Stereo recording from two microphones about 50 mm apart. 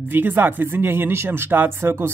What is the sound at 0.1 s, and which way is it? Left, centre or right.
Speech, right.